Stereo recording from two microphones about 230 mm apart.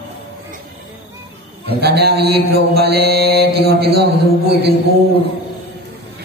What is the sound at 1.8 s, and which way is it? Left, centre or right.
Mantra, right.